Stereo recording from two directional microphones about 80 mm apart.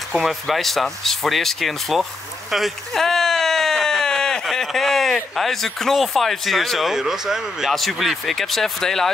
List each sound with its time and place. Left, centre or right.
0.1 s speech: centre